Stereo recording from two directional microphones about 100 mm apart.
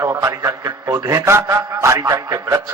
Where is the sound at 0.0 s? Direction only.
30° right (ahead or behind).